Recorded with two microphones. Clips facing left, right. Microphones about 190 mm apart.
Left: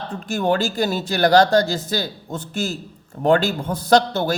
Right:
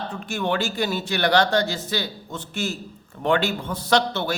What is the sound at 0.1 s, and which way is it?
Speech, 40° left (ahead or behind).